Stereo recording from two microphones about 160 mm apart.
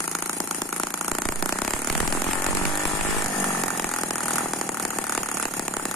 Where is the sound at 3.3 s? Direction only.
Centre (ahead or behind).